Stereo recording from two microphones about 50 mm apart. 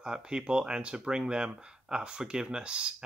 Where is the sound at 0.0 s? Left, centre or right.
Centre.